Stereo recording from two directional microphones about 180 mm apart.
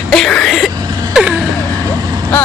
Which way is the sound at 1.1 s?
5° right (ahead or behind).